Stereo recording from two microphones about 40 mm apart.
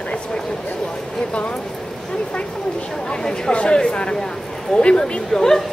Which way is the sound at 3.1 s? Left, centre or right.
Left.